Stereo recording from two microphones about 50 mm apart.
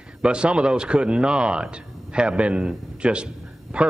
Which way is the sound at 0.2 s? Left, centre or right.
Right.